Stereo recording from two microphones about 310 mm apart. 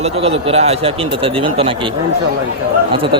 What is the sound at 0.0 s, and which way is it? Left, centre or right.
Speech, centre.